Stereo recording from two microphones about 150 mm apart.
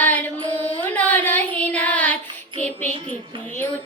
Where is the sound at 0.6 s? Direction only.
10° left (ahead or behind).